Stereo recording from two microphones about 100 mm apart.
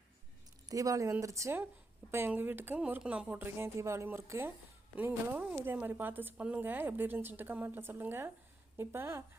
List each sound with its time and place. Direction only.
0.7 s speech: 35° right (ahead or behind); by 3.2 s 10° right (ahead or behind)
3.2 s speech: 20° right (ahead or behind)